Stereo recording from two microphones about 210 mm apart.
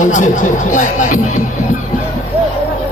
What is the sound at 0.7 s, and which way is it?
Speech, 35° left (ahead or behind).